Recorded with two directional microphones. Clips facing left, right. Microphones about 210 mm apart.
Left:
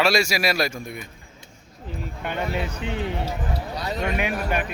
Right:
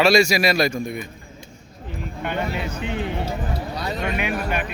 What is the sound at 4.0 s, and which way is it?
Speech, 40° left (ahead or behind).